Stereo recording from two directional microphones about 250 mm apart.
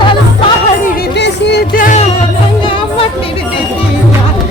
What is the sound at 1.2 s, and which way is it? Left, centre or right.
Music, left.